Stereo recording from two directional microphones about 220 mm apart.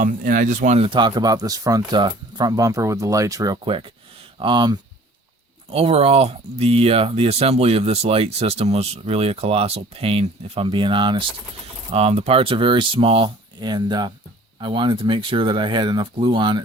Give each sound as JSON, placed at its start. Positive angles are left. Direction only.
{"t": 0.0, "sound": "speech", "side_deg": -35}